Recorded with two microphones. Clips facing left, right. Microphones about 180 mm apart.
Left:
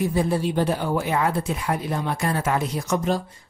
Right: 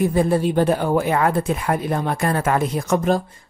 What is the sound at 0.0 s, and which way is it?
Speech, 50° right (ahead or behind).